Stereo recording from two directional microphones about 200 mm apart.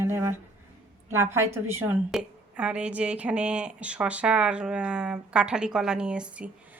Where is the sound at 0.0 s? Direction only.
10° right (ahead or behind).